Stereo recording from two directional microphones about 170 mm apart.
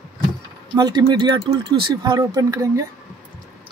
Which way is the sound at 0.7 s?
25° right (ahead or behind).